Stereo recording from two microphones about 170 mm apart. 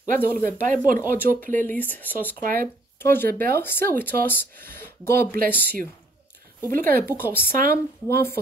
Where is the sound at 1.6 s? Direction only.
10° left (ahead or behind).